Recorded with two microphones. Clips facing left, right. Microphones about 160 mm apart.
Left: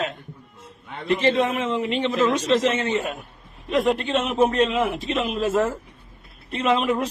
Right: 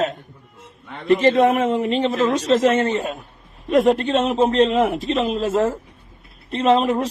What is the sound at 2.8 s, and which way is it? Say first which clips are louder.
A man's voice: right 2 dB; 35° right (ahead or behind).